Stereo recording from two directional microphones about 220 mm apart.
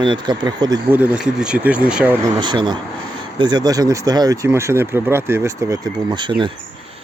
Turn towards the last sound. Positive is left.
turn(degrees=-20)  # may be behind; listen again after turning